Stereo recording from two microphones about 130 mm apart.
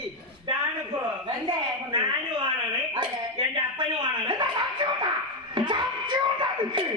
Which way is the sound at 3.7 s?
35° right (ahead or behind).